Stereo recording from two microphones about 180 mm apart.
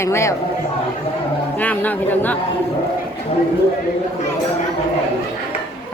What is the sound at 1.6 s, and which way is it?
Speech, 10° left (ahead or behind).